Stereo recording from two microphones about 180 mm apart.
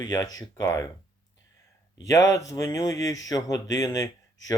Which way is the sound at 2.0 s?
20° left (ahead or behind).